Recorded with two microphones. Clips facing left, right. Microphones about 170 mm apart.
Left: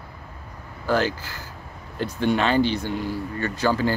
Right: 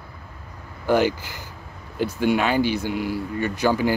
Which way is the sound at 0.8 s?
15° right (ahead or behind).